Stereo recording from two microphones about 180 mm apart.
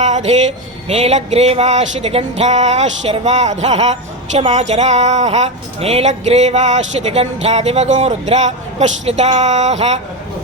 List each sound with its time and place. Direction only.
0.0 s music: 40° right (ahead or behind)
0.9 s speech: 35° right (ahead or behind)